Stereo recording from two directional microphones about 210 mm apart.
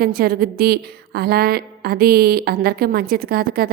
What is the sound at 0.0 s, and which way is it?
A woman's voice, 45° right (ahead or behind).